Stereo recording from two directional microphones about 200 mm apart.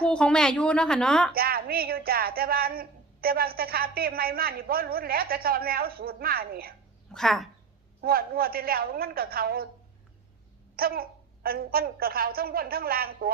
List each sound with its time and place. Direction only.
0.0 s a woman's voice: 5° left (ahead or behind)
1.3 s speech: 50° right (ahead or behind)
7.1 s a woman's voice: centre (ahead or behind)
8.0 s speech: 50° right (ahead or behind)
10.8 s speech: 50° right (ahead or behind)